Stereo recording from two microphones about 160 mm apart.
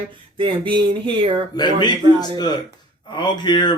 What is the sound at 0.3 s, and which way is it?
Speech, 30° right (ahead or behind).